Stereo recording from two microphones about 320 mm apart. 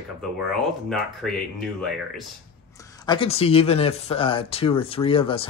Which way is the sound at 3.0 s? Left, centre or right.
Centre.